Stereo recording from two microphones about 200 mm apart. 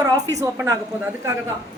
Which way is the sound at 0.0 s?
15° right (ahead or behind).